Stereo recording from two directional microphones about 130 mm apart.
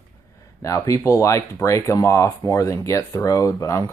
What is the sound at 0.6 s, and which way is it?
Speech, 25° left (ahead or behind).